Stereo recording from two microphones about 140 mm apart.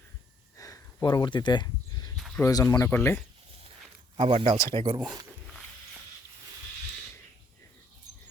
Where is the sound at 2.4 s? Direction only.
25° left (ahead or behind).